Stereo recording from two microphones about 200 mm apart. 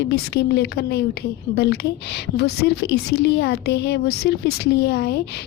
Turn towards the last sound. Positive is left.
turn(degrees=55)  # may be behind; listen again after turning